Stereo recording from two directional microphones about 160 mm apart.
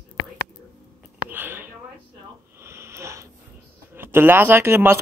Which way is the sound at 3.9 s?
15° right (ahead or behind).